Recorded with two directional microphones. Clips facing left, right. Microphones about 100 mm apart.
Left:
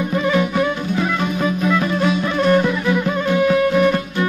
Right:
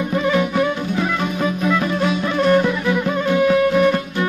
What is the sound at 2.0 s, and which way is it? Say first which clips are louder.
Music: even; 20° right (ahead or behind).